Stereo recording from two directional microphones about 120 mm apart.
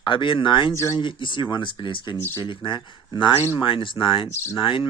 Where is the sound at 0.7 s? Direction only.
25° left (ahead or behind).